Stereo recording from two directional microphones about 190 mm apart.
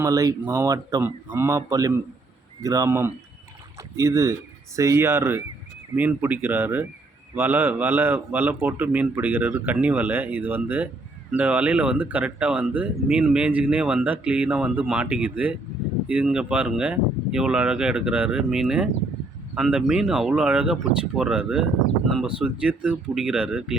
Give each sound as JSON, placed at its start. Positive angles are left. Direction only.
{"t": 0.0, "sound": "speech", "side_deg": -20}